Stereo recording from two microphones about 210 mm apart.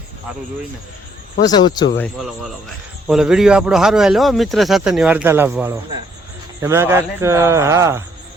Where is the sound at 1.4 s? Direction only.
20° left (ahead or behind).